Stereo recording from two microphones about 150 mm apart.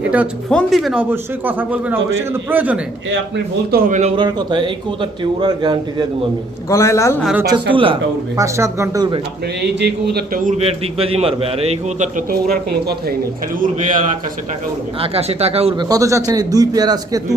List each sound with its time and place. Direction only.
0.5 s speech: centre (ahead or behind)
1.1 s a man's voice: 10° right (ahead or behind)
3.7 s a man's voice: 70° right (ahead or behind)
4.2 s a man's voice: 30° right (ahead or behind)
6.7 s a man's voice: 20° left (ahead or behind)
7.5 s a man's voice: 35° right (ahead or behind)
8.4 s a man's voice: 20° right (ahead or behind)
9.8 s speech: 90° right
10.6 s a man's voice: 40° right (ahead or behind)
12.1 s speech: 85° right
13.6 s a man's voice: 60° right (ahead or behind)
15.0 s a man's voice: 40° right (ahead or behind)
15.8 s a man's voice: 25° right (ahead or behind)